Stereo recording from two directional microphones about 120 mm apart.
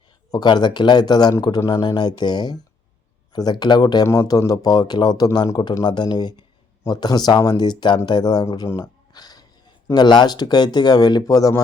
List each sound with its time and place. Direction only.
0.3 s speech: 35° left (ahead or behind)